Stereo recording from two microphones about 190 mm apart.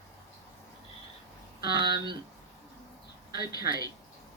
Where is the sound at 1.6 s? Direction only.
25° right (ahead or behind).